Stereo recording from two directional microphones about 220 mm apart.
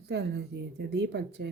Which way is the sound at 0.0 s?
50° right (ahead or behind).